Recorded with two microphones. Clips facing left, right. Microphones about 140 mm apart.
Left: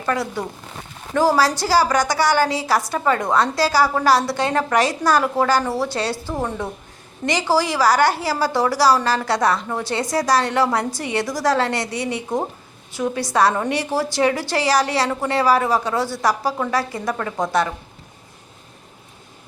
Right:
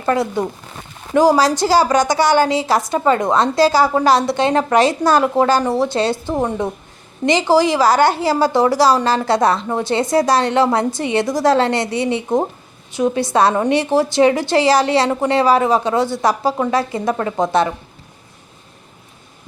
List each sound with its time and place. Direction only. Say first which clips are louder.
0.0 s a woman's voice: right 5 dB; 25° right (ahead or behind)